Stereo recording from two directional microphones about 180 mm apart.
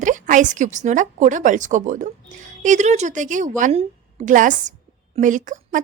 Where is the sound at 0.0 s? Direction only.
45° right (ahead or behind).